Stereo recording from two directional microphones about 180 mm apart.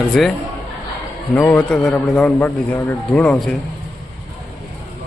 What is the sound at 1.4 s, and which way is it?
A man's voice, 10° left (ahead or behind).